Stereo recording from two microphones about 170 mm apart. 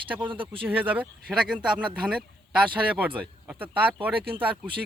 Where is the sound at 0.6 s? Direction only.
10° right (ahead or behind).